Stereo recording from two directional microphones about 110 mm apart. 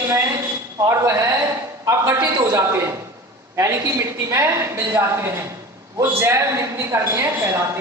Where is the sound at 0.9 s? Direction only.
25° right (ahead or behind).